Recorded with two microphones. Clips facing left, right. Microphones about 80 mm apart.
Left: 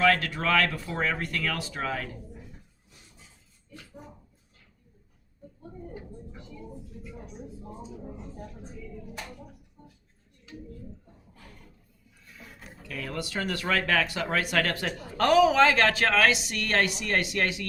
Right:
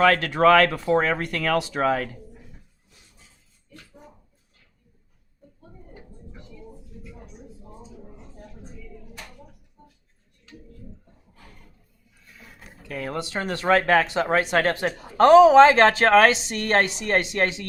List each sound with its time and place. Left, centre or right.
0.0 s speech: right
12.9 s speech: right